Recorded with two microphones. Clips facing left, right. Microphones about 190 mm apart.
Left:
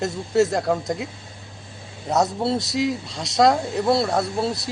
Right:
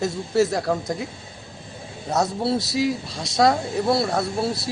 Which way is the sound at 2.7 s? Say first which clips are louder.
Even; centre (ahead or behind).